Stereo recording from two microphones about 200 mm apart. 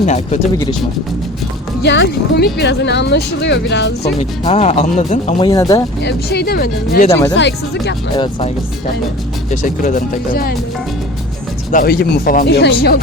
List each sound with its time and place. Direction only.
0.0 s speech: 35° left (ahead or behind)
1.8 s speech: 60° left (ahead or behind)
4.2 s speech: 30° left (ahead or behind)
5.5 s speech: 15° left (ahead or behind)
6.0 s speech: 55° left (ahead or behind)
7.1 s speech: 15° left (ahead or behind)
7.3 s speech: 60° left (ahead or behind)
8.1 s speech: 25° left (ahead or behind)
9.5 s speech: 45° left (ahead or behind)
11.7 s speech: 45° left (ahead or behind)